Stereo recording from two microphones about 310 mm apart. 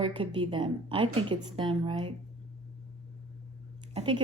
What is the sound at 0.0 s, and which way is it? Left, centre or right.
Speech, centre.